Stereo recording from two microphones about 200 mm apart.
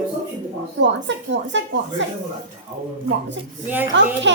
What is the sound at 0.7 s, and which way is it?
A child's voice, 65° right (ahead or behind).